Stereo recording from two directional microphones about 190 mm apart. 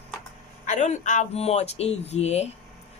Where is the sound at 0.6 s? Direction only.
40° left (ahead or behind).